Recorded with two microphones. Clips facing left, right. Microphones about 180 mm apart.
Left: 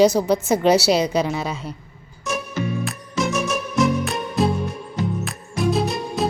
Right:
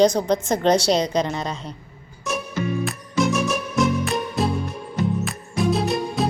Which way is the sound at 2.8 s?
Centre (ahead or behind).